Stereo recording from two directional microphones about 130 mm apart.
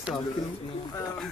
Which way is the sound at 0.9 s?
25° left (ahead or behind).